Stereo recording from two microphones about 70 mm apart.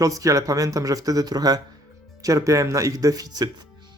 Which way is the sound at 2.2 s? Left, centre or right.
Right.